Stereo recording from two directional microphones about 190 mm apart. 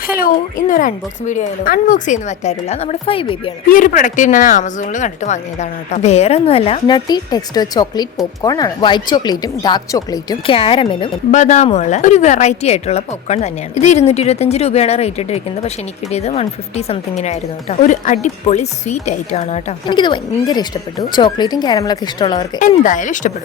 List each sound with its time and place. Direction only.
0.2 s a woman's voice: 45° left (ahead or behind); by 3.5 s 30° left (ahead or behind)
3.7 s speech: 45° left (ahead or behind); by 11.1 s 30° left (ahead or behind)
11.3 s a woman's voice: 40° left (ahead or behind)
19.9 s speech: 25° left (ahead or behind)
22.5 s a woman's voice: 40° left (ahead or behind)